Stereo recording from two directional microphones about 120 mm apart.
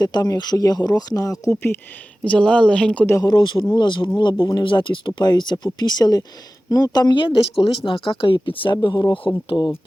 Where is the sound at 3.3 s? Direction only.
40° left (ahead or behind).